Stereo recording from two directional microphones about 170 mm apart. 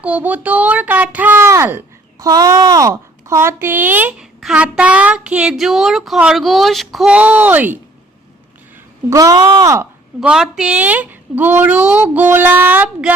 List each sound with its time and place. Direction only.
0.0 s a child's voice: 10° right (ahead or behind)
9.0 s speech: 20° right (ahead or behind)
10.2 s a child's voice: centre (ahead or behind)